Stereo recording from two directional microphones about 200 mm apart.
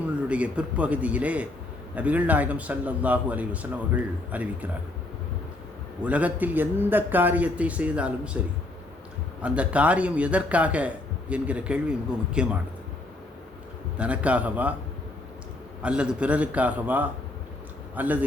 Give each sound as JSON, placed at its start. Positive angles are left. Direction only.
{"t": 0.3, "sound": "a man's voice", "side_deg": -5}
{"t": 6.1, "sound": "a man's voice", "side_deg": -5}
{"t": 9.4, "sound": "a man's voice", "side_deg": -5}
{"t": 14.0, "sound": "a man's voice", "side_deg": -5}
{"t": 15.8, "sound": "a man's voice", "side_deg": -5}